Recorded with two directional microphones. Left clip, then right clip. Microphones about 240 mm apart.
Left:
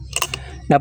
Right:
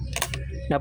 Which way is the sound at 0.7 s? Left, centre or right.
Left.